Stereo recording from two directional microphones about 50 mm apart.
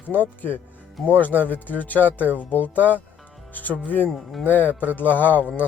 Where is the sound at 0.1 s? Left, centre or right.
Left.